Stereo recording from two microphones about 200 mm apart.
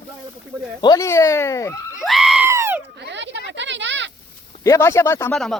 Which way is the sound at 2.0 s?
Centre (ahead or behind).